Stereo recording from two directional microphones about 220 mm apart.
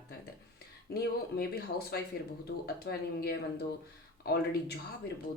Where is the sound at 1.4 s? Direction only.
45° left (ahead or behind).